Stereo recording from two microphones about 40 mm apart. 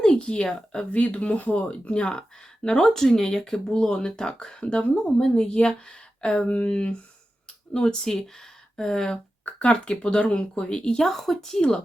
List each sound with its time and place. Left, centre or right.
0.0 s speech: left
0.9 s speech: left
7.7 s speech: left
9.4 s speech: left
11.1 s speech: centre
11.4 s speech: centre